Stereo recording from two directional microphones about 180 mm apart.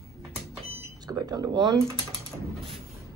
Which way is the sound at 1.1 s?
20° right (ahead or behind).